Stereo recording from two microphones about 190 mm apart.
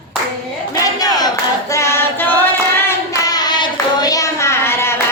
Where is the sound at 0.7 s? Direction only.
20° left (ahead or behind).